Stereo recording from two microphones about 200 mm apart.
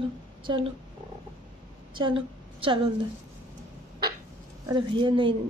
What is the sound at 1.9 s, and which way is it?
Speech, 25° right (ahead or behind).